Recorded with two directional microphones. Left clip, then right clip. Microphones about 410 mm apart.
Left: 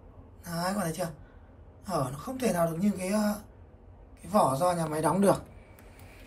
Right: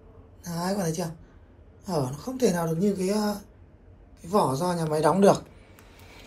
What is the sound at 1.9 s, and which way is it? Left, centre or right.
A man's voice, centre.